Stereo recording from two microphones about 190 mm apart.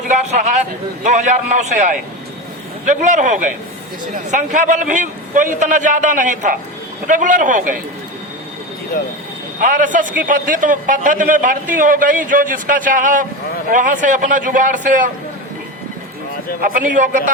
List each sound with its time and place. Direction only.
0.1 s a sound: 40° right (ahead or behind)
1.0 s a man's voice: 40° right (ahead or behind)
9.6 s a man's voice: 45° right (ahead or behind)
16.6 s a man's voice: 45° right (ahead or behind)